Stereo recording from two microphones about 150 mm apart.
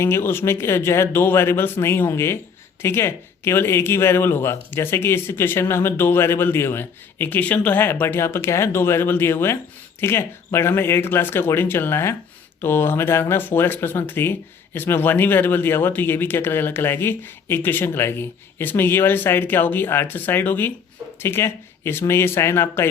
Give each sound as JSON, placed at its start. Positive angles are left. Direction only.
{"t": 0.0, "sound": "speech", "side_deg": 15}